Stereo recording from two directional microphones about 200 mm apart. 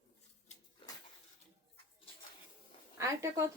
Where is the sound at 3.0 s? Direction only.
15° right (ahead or behind).